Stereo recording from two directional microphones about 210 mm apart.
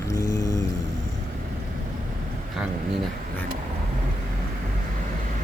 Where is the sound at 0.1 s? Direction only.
15° left (ahead or behind).